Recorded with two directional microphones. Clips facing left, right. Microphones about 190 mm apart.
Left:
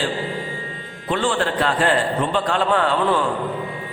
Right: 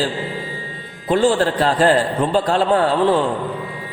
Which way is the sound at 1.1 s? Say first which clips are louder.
Right 6 dB; 40° right (ahead or behind).